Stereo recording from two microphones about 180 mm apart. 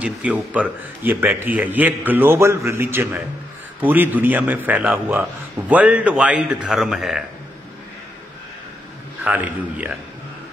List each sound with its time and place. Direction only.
0.0 s a man's voice: 10° right (ahead or behind)
9.2 s a man's voice: 10° right (ahead or behind)